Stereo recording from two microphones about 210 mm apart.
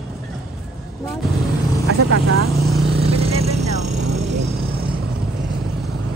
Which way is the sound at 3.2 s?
30° right (ahead or behind).